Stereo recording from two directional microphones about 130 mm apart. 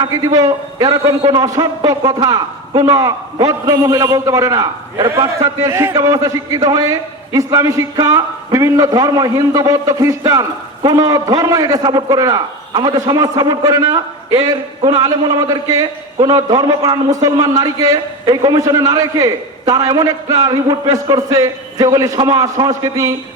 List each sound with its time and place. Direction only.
0.0 s a man's voice: 25° right (ahead or behind)